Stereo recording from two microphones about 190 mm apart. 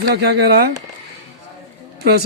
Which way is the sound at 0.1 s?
60° right (ahead or behind).